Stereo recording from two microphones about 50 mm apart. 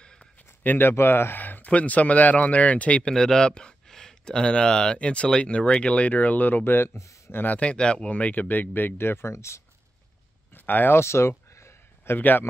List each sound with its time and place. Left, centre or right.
0.2 s a sound: left
1.4 s speech: left
3.0 s speech: centre; by 6.6 s left
6.6 s speech: left
7.4 s speech: left
7.7 s speech: centre
8.1 s speech: left
8.9 s speech: left
9.3 s speech: left
10.5 s a sound: left
11.0 s a sound: left
12.2 s speech: left